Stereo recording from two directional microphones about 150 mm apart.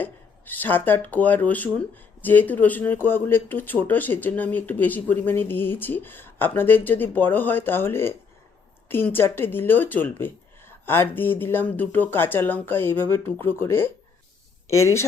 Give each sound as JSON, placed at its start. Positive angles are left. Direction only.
{"t": 0.0, "sound": "speech", "side_deg": 10}